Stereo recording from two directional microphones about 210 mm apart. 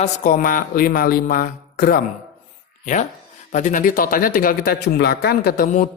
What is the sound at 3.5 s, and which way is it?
Speech, 35° left (ahead or behind).